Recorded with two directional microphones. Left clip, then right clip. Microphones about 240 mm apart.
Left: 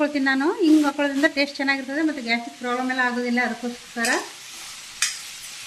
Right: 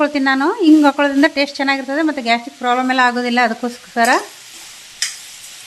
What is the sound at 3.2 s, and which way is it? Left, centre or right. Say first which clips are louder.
Frying: right 8 dB; right.